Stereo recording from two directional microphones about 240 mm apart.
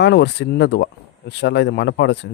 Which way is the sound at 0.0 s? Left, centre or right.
Left.